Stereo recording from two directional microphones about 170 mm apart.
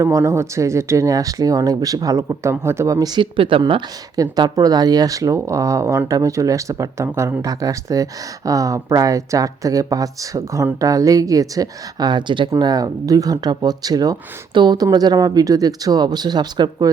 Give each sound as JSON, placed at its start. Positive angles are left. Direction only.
{"t": 0.0, "sound": "speech", "side_deg": -15}